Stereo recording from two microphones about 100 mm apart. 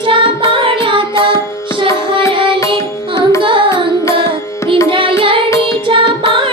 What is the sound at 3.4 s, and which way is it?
Carnatic music, 55° right (ahead or behind).